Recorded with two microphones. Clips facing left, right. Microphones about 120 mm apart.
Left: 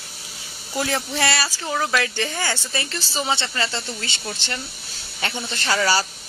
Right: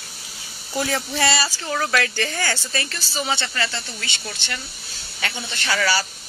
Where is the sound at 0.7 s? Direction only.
Centre (ahead or behind).